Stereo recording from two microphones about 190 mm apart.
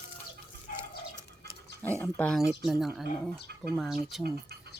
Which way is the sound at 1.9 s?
5° left (ahead or behind).